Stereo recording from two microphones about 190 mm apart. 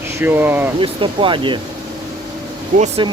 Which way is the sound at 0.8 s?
25° right (ahead or behind).